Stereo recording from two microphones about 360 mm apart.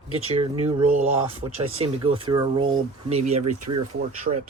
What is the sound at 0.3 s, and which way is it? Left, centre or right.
Speech, centre.